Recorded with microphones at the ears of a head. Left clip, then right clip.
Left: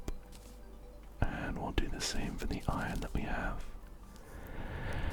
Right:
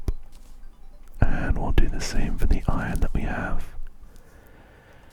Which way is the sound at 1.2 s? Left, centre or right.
Right.